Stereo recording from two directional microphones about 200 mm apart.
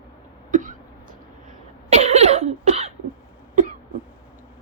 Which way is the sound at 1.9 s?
35° right (ahead or behind).